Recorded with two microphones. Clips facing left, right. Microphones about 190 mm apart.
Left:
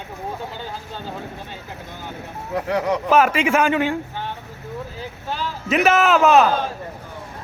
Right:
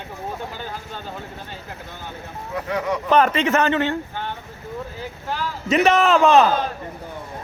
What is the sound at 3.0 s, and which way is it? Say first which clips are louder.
Speech: right 1 dB; 5° left (ahead or behind).